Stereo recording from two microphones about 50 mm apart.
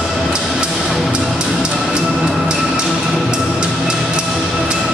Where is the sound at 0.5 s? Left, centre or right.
Centre.